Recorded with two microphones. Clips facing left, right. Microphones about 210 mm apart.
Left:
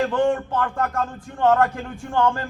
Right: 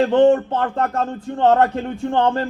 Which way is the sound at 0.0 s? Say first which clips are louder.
Right 7 dB; 25° right (ahead or behind).